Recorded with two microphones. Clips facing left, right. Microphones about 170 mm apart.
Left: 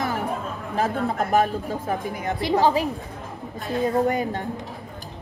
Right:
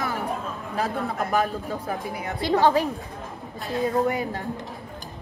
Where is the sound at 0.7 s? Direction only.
45° left (ahead or behind).